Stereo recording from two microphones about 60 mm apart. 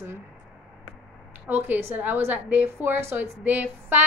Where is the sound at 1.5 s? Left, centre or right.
Right.